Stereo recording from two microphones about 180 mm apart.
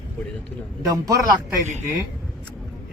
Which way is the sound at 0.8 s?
20° right (ahead or behind).